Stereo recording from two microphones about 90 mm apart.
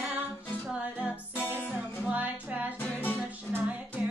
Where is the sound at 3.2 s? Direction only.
20° right (ahead or behind).